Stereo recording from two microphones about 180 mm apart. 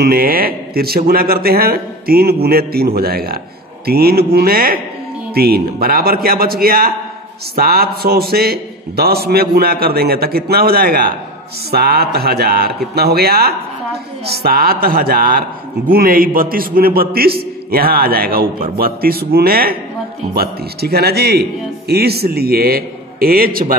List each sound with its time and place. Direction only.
0.0 s a man's voice: 55° right (ahead or behind)